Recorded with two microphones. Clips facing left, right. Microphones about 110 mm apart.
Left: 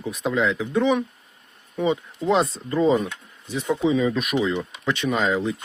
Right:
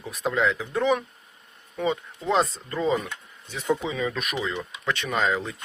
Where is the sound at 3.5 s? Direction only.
10° left (ahead or behind).